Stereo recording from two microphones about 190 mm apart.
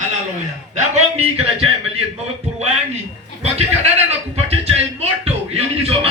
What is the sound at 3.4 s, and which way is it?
Speech, 35° right (ahead or behind).